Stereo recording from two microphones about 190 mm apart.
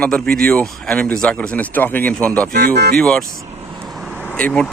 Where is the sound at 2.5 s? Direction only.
55° right (ahead or behind).